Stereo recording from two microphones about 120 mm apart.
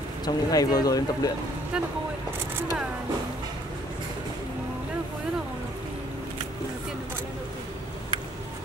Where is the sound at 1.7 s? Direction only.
5° right (ahead or behind).